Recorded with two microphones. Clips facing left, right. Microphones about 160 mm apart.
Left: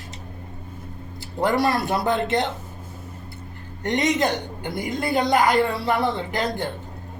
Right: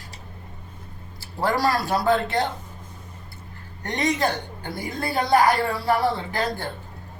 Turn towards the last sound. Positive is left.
turn(degrees=20)  # may be behind; listen again after turning